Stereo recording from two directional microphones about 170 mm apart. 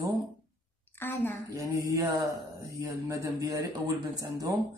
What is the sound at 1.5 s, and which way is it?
A woman's voice, 20° right (ahead or behind).